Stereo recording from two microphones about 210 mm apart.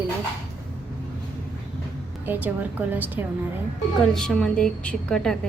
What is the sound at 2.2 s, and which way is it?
A woman's voice, 10° right (ahead or behind).